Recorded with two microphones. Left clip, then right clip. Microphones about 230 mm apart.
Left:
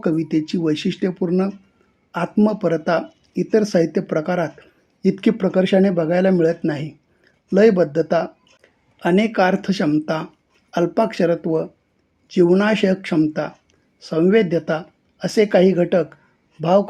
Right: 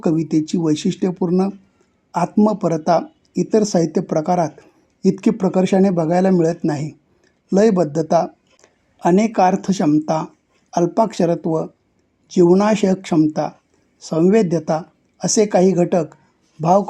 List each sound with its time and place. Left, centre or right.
0.0 s speech: right